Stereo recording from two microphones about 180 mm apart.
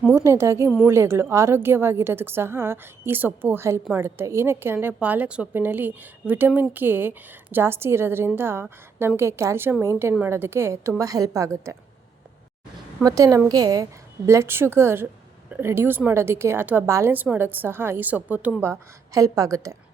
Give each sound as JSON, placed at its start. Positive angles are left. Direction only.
{"t": 0.1, "sound": "a woman's voice", "side_deg": -15}
{"t": 13.0, "sound": "a woman's voice", "side_deg": -20}